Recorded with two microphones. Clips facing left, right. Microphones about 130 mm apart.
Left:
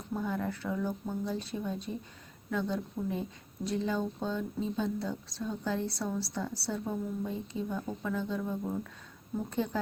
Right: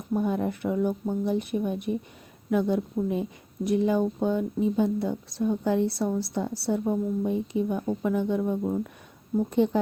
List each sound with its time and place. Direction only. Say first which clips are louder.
0.1 s a woman's voice: right 8 dB; 20° right (ahead or behind)